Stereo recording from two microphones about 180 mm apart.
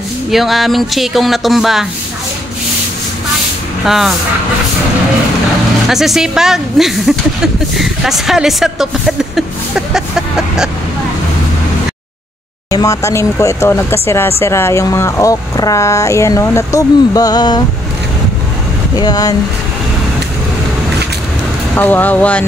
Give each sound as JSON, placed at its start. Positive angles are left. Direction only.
{"t": 0.3, "sound": "speech", "side_deg": 0}
{"t": 3.8, "sound": "speech", "side_deg": 0}
{"t": 5.9, "sound": "speech", "side_deg": 0}
{"t": 12.7, "sound": "speech", "side_deg": 15}
{"t": 18.9, "sound": "speech", "side_deg": 20}
{"t": 21.7, "sound": "speech", "side_deg": 10}